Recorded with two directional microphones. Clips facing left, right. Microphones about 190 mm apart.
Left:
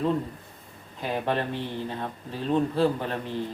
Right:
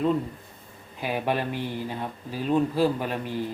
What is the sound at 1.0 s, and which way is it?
Speech, 10° right (ahead or behind).